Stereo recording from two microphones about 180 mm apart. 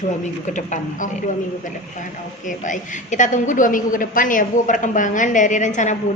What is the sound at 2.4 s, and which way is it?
Speech, 45° left (ahead or behind).